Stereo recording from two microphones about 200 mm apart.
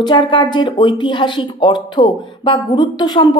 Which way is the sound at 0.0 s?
20° left (ahead or behind).